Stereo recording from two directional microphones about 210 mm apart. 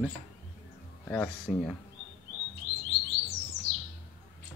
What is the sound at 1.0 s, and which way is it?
Speech, 5° left (ahead or behind).